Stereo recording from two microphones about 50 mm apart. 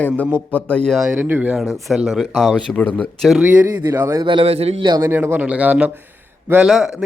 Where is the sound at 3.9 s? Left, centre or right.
Right.